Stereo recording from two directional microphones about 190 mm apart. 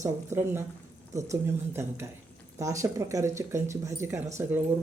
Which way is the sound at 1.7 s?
15° right (ahead or behind).